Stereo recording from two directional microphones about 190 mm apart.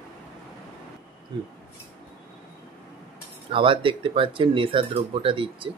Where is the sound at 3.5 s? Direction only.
25° right (ahead or behind).